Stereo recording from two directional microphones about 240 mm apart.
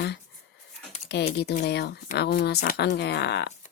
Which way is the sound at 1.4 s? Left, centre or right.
Left.